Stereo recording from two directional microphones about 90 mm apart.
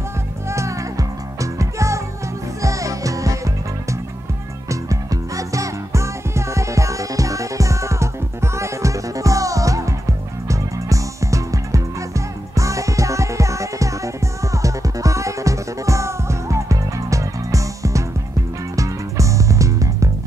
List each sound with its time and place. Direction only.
0.5 s music: 35° right (ahead or behind)
4.6 s music: 40° right (ahead or behind)